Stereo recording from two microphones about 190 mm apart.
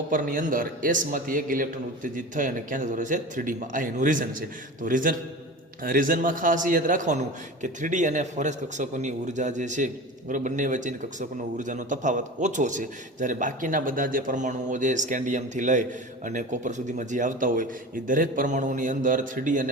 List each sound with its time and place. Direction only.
0.1 s a man's voice: 45° right (ahead or behind)